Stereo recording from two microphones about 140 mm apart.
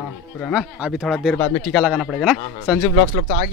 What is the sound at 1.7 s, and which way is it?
Speech, 5° right (ahead or behind).